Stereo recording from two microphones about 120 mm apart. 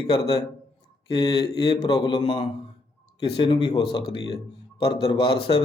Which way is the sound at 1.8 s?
50° left (ahead or behind).